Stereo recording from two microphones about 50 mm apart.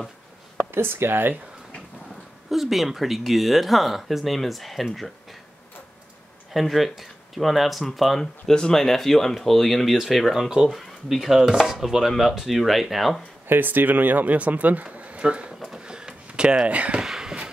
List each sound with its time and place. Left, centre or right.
0.7 s speech: right
2.5 s speech: centre
6.5 s speech: centre
13.5 s speech: right
15.8 s a sound: centre
17.0 s a sound: centre